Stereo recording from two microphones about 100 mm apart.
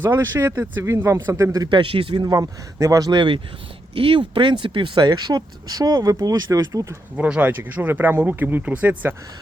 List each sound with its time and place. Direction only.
0.2 s speech: 20° right (ahead or behind)
1.0 s speech: 30° right (ahead or behind)
1.7 s speech: 60° right (ahead or behind)
2.2 s speech: 35° right (ahead or behind)
3.1 s speech: 50° right (ahead or behind)
7.2 s speech: 15° right (ahead or behind)